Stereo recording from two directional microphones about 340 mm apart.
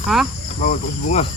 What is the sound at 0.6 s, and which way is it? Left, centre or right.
Speech, left.